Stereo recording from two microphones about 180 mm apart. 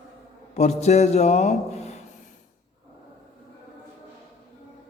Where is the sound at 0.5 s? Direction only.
40° left (ahead or behind).